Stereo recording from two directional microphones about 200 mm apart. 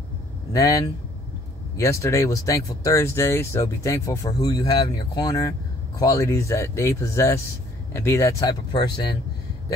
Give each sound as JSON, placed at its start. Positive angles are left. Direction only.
{"t": 0.5, "sound": "speech", "side_deg": 15}